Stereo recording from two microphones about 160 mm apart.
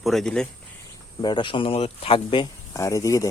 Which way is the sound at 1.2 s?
30° left (ahead or behind).